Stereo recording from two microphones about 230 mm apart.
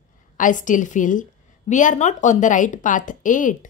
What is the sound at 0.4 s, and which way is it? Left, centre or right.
A woman's voice, left.